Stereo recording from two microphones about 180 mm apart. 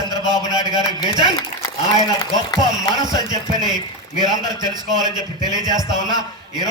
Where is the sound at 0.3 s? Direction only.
25° right (ahead or behind).